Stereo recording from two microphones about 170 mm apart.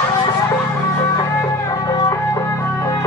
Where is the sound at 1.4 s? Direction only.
20° left (ahead or behind).